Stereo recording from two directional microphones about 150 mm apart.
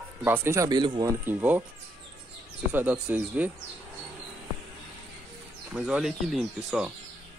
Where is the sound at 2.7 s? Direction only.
10° right (ahead or behind).